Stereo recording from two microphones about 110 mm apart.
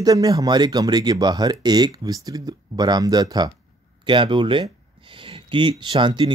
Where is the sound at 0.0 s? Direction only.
35° right (ahead or behind).